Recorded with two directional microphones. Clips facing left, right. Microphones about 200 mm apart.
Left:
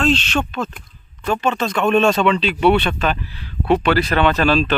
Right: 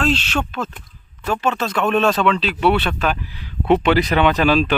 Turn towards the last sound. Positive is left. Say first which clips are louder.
# even
turn(degrees=-15)  # may be behind; listen again after turning